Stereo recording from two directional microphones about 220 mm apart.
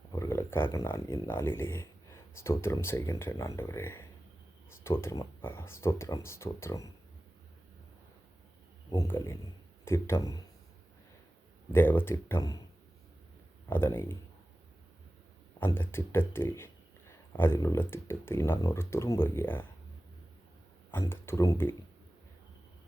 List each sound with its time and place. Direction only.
0.1 s a man's voice: 15° left (ahead or behind)
8.9 s a man's voice: 10° left (ahead or behind)
11.7 s a man's voice: 10° left (ahead or behind)
13.7 s a man's voice: 10° left (ahead or behind)
15.6 s a man's voice: 10° left (ahead or behind)
20.9 s a man's voice: 10° left (ahead or behind)